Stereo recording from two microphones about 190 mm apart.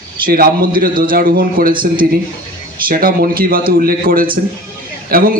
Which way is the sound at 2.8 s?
50° right (ahead or behind).